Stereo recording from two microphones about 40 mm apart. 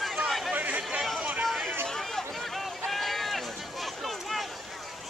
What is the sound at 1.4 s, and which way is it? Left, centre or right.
Chatter, centre.